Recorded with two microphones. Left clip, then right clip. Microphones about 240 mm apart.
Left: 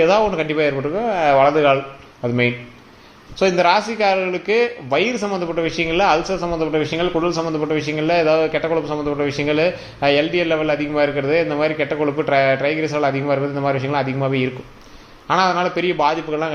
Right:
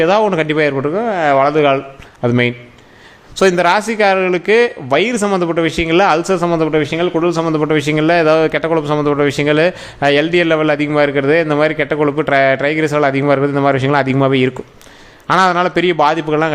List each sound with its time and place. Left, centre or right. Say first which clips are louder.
0.0 s a man's voice: right 3 dB; right